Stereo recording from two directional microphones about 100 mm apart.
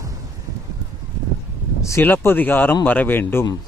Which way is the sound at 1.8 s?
30° left (ahead or behind).